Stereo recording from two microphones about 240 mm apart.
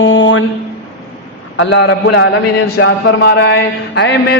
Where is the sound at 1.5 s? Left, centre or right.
Left.